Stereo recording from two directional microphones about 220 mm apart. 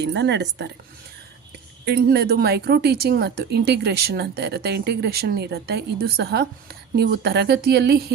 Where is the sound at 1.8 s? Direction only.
45° right (ahead or behind).